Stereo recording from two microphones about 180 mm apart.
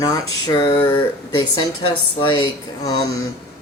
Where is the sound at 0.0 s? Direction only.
20° left (ahead or behind).